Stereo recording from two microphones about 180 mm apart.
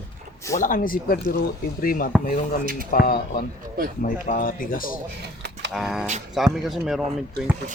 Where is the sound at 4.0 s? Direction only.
45° left (ahead or behind).